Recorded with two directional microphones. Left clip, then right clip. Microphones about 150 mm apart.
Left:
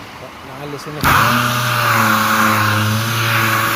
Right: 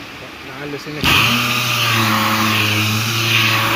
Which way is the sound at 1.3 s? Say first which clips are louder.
Left 1 dB; 40° left (ahead or behind).